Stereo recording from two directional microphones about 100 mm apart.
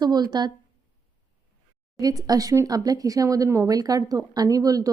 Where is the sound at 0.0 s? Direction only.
45° right (ahead or behind).